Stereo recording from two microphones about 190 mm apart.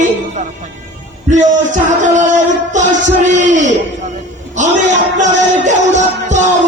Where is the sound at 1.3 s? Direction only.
40° right (ahead or behind).